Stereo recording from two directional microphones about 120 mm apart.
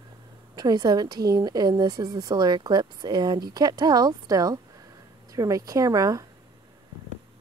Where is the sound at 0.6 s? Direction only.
35° right (ahead or behind).